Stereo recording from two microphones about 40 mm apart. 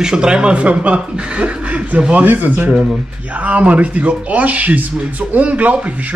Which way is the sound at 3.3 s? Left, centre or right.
Right.